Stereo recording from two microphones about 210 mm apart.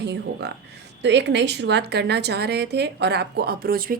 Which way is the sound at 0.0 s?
50° right (ahead or behind).